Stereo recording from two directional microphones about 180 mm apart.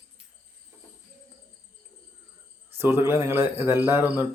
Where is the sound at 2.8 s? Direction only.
15° right (ahead or behind).